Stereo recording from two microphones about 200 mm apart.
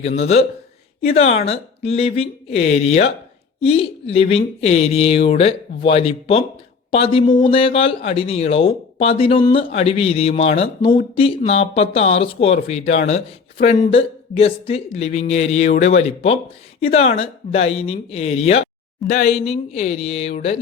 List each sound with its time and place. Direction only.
0.0 s speech: 30° left (ahead or behind)